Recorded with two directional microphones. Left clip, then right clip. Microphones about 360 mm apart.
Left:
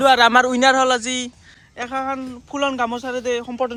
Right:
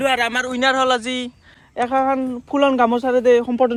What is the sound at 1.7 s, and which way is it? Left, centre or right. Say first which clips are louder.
Speech: right 6 dB; centre.